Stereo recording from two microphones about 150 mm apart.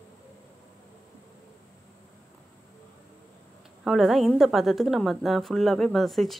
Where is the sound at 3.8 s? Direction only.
Centre (ahead or behind).